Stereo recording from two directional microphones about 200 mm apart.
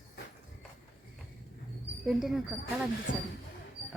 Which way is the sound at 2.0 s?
Centre (ahead or behind).